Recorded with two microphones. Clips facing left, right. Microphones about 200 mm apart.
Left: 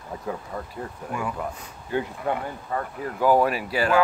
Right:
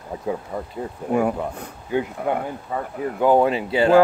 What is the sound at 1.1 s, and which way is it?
Speech, 55° right (ahead or behind).